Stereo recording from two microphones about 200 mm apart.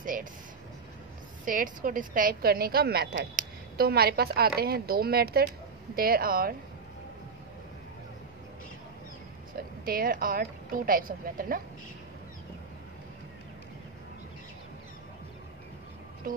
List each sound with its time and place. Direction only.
0.0 s vehicle: 45° right (ahead or behind)
1.4 s a woman's voice: 40° right (ahead or behind)
9.6 s a woman's voice: 45° right (ahead or behind)
16.3 s speech: 45° right (ahead or behind)